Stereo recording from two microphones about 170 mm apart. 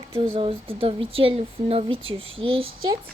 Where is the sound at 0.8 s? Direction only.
35° right (ahead or behind).